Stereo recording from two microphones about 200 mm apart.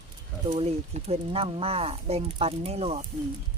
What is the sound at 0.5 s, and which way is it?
Speech, 30° right (ahead or behind).